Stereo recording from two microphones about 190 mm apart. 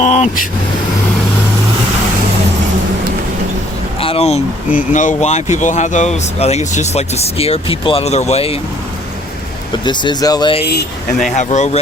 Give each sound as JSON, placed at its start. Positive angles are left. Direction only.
{"t": 0.0, "sound": "vehicle", "side_deg": 40}
{"t": 4.0, "sound": "a sound", "side_deg": 30}
{"t": 4.9, "sound": "speech", "side_deg": 40}
{"t": 9.8, "sound": "speech", "side_deg": 25}
{"t": 11.3, "sound": "speech", "side_deg": 40}